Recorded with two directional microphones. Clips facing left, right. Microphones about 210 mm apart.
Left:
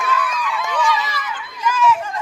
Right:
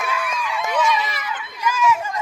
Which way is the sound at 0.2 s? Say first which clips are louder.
Left 2 dB; 25° right (ahead or behind).